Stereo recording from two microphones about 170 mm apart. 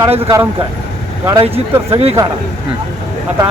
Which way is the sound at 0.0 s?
25° right (ahead or behind).